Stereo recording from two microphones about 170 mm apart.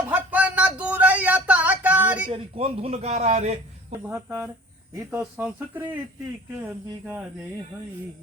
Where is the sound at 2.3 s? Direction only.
35° right (ahead or behind).